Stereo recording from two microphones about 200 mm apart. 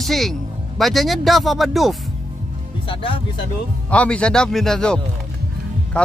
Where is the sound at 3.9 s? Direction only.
5° left (ahead or behind).